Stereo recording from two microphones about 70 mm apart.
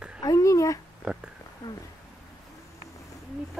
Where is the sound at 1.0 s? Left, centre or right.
Centre.